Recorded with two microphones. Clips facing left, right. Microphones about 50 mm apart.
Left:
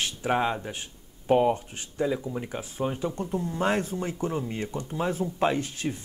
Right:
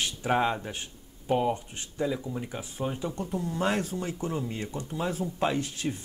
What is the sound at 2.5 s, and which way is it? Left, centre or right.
Speech, left.